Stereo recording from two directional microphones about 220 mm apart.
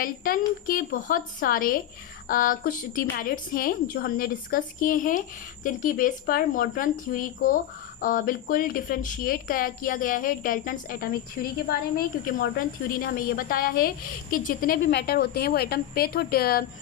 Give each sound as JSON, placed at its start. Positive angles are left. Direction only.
{"t": 0.0, "sound": "a woman's voice", "side_deg": 40}
{"t": 14.8, "sound": "speech", "side_deg": 50}